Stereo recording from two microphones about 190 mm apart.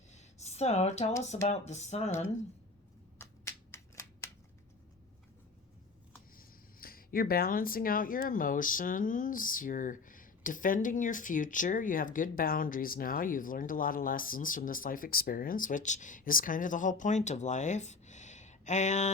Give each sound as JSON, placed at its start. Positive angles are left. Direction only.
{"t": 0.1, "sound": "a sound", "side_deg": 35}
{"t": 1.5, "sound": "speech", "side_deg": 35}
{"t": 3.2, "sound": "shuffling cards", "side_deg": 15}
{"t": 6.3, "sound": "speech", "side_deg": 50}